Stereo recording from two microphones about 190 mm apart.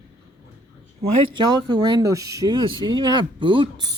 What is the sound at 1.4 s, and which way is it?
Speech, 25° right (ahead or behind).